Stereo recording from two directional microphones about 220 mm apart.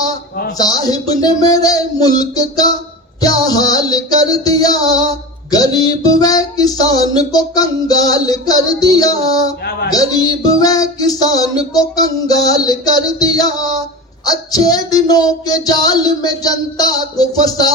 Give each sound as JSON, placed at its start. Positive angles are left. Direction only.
{"t": 0.5, "sound": "music", "side_deg": 15}